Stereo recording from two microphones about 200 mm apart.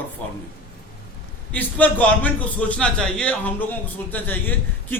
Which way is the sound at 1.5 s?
5° left (ahead or behind).